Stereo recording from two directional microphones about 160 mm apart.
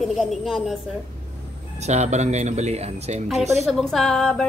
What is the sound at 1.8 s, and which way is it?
Speech, 45° right (ahead or behind).